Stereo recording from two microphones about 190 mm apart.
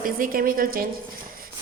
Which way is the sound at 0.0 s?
45° right (ahead or behind).